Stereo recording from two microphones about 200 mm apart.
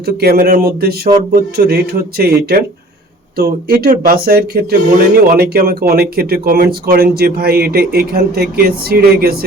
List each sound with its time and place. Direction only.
0.0 s speech: 50° right (ahead or behind)